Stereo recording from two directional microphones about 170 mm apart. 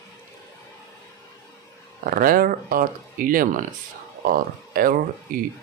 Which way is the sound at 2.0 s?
55° right (ahead or behind).